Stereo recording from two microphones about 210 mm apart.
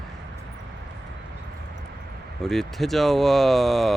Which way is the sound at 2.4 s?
Centre (ahead or behind).